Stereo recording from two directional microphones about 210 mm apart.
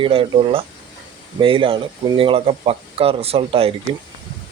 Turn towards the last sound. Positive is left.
turn(degrees=-25)  # may be behind; listen again after turning